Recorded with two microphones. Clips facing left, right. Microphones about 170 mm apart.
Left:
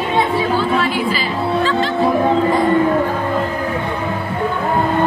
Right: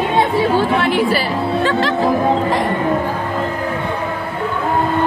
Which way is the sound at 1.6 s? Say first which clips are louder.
Right 1 dB; 70° right (ahead or behind).